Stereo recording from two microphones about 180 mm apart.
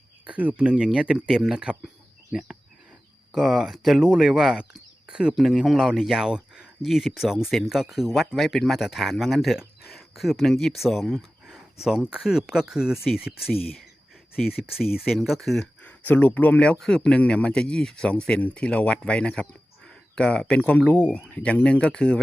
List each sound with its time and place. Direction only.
0.3 s speech: 10° right (ahead or behind)
14.4 s speech: 60° left (ahead or behind)
14.8 s speech: centre (ahead or behind)